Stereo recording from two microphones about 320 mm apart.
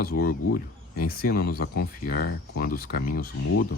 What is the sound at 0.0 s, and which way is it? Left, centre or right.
Speech, left.